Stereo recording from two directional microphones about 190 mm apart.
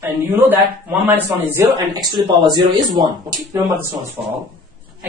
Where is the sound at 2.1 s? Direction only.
20° right (ahead or behind).